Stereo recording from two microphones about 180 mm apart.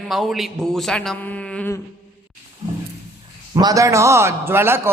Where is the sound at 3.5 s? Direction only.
20° right (ahead or behind).